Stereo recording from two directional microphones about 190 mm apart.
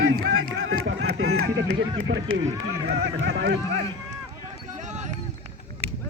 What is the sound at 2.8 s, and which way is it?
Speech, 75° right (ahead or behind).